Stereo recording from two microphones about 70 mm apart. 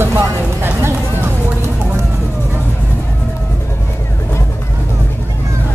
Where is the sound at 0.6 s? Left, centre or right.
Right.